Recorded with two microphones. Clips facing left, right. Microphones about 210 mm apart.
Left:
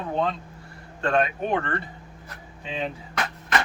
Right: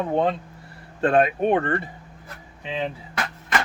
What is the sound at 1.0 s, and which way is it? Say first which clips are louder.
Speech: right 5 dB; 35° right (ahead or behind).